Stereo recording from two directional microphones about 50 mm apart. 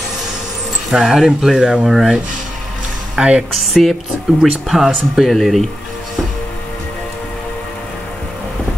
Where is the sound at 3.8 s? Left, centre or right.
Centre.